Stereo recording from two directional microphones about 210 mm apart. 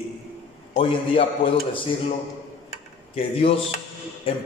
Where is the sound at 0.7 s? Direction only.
25° left (ahead or behind).